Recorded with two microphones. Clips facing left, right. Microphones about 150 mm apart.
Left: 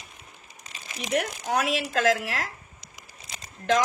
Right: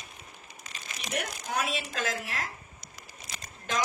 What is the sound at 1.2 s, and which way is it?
Speech, 65° left (ahead or behind).